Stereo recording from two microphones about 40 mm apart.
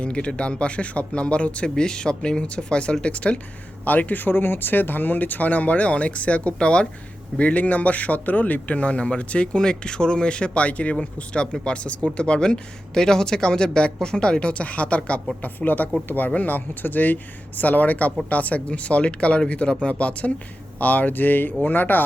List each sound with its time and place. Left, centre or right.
0.0 s speech: left
1.7 s speech: centre
3.8 s a man's voice: left
15.6 s a man's voice: left